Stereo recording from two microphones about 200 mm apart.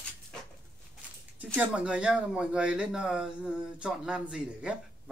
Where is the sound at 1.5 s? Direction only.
5° right (ahead or behind).